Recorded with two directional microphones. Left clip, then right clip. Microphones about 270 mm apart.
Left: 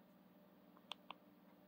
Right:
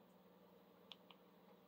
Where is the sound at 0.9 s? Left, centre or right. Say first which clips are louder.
Left 8 dB; left.